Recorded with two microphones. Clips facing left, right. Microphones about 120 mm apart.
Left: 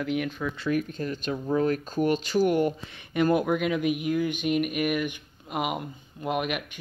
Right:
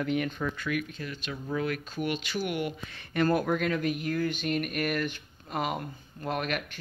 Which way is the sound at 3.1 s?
15° left (ahead or behind).